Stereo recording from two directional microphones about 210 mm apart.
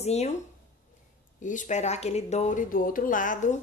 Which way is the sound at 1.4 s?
35° left (ahead or behind).